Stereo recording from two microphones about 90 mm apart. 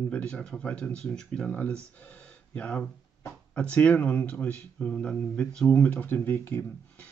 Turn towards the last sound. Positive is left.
turn(degrees=20)  # may be behind; listen again after turning